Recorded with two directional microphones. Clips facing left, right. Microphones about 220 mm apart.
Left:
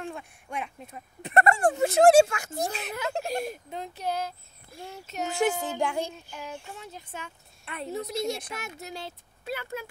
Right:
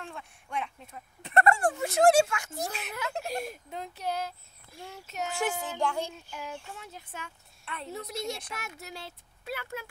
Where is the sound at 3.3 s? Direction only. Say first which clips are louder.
Left 4 dB; centre (ahead or behind).